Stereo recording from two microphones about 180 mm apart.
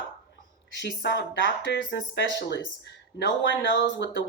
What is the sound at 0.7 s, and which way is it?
Speech, 75° left (ahead or behind).